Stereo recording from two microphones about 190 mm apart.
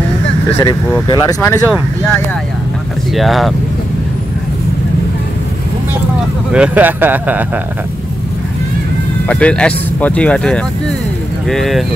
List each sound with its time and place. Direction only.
0.6 s speech: 15° left (ahead or behind)
3.2 s speech: centre (ahead or behind)
6.5 s speech: 5° right (ahead or behind)
9.3 s speech: 5° left (ahead or behind)